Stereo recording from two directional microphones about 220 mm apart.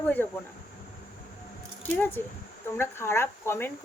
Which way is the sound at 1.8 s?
10° left (ahead or behind).